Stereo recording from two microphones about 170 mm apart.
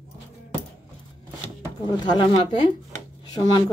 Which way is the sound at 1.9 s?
25° left (ahead or behind).